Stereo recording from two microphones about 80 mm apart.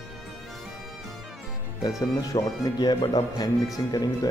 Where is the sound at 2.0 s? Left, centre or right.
Left.